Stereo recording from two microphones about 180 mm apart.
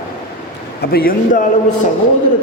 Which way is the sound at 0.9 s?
50° left (ahead or behind).